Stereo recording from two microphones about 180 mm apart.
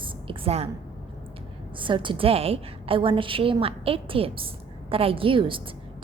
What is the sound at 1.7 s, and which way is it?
A woman's voice, 25° right (ahead or behind).